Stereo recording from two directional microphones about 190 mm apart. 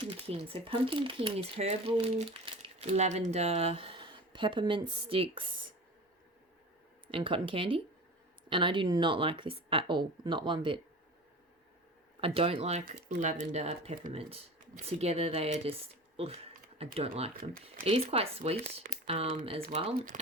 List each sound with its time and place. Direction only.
0.0 s speech: 30° right (ahead or behind)
7.1 s speech: 30° right (ahead or behind)
12.2 s speech: 30° right (ahead or behind)